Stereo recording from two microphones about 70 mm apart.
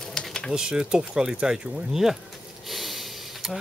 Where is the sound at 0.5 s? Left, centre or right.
Centre.